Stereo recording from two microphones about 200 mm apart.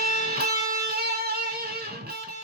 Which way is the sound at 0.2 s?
50° right (ahead or behind).